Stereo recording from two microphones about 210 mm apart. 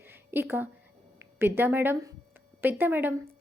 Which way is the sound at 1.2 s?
10° right (ahead or behind).